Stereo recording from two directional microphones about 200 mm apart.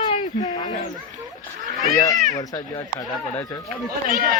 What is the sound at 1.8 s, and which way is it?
Speech, 20° left (ahead or behind).